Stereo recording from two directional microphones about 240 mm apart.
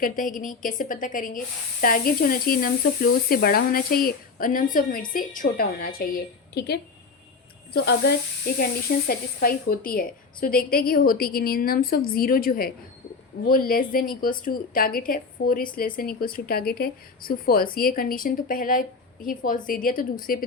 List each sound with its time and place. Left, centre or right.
0.0 s speech: left